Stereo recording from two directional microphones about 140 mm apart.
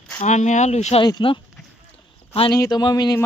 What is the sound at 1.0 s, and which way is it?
Speech, 35° left (ahead or behind).